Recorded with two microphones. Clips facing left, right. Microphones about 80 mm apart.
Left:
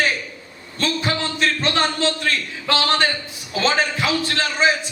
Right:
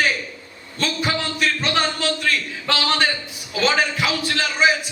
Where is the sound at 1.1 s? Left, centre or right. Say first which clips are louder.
Even; left.